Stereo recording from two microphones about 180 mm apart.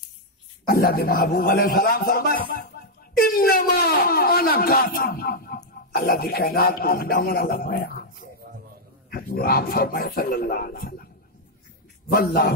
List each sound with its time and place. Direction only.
0.7 s speech: 55° left (ahead or behind)
12.2 s speech: 55° left (ahead or behind)